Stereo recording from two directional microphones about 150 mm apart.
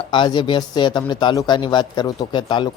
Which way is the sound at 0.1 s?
35° left (ahead or behind).